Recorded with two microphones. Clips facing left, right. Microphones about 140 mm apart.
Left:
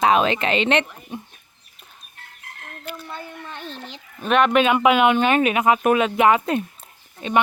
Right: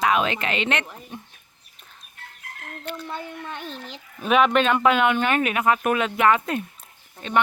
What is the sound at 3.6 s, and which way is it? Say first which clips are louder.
Speech: even; 5° right (ahead or behind).